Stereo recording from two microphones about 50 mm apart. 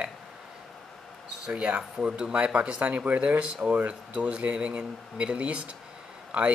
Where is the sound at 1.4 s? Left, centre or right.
Right.